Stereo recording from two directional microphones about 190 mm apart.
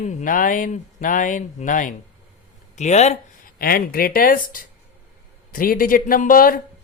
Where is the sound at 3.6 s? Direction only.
50° left (ahead or behind).